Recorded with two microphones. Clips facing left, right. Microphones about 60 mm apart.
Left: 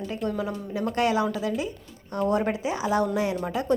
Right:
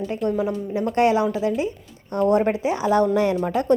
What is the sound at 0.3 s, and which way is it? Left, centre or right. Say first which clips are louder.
A woman's voice: right 7 dB; right.